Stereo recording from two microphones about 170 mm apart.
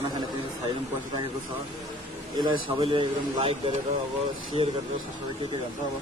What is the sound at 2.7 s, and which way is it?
Speech, 35° right (ahead or behind).